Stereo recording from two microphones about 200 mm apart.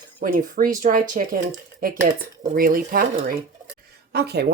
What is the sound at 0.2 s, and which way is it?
Speech, 40° right (ahead or behind).